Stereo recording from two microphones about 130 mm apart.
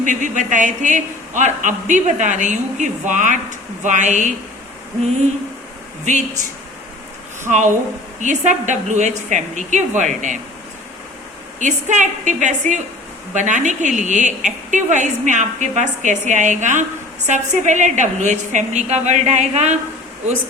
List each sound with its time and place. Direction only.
0.0 s a woman's voice: 75° right (ahead or behind)
6.1 s a woman's voice: 65° right (ahead or behind)
8.2 s a woman's voice: 70° right (ahead or behind)
11.6 s a woman's voice: 70° right (ahead or behind)